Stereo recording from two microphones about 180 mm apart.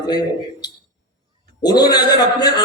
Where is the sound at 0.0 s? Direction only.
20° left (ahead or behind).